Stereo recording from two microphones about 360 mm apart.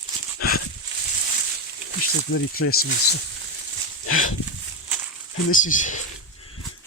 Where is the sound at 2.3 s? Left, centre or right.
Left.